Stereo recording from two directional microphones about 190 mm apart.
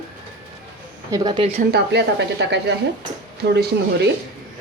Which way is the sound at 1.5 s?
60° right (ahead or behind).